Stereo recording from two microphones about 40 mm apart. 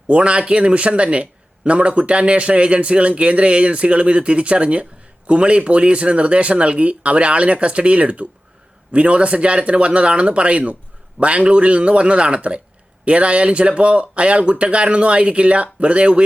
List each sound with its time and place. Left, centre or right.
0.1 s a man's voice: right